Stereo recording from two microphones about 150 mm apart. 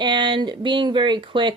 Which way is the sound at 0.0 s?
30° right (ahead or behind).